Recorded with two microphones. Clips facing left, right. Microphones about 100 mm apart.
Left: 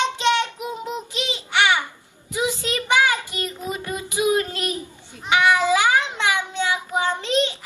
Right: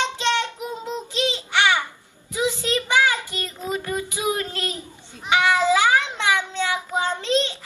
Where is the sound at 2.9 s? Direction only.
20° left (ahead or behind).